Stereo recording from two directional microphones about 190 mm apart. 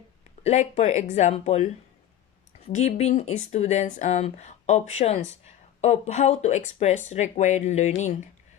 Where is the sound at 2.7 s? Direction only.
35° left (ahead or behind).